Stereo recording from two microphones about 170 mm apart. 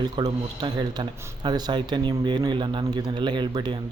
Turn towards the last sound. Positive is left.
turn(degrees=-25)  # may be behind; listen again after turning